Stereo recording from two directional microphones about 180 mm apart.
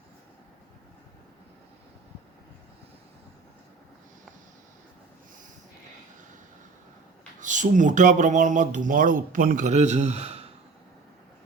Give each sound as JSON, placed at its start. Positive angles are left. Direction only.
{"t": 7.3, "sound": "speech", "side_deg": -45}